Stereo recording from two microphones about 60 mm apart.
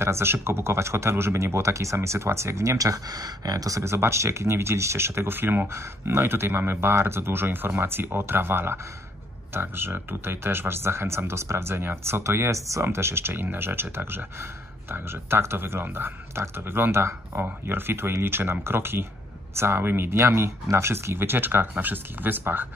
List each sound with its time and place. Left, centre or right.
0.0 s speech: right
3.8 s speech: right
5.7 s speech: right
17.4 s speech: right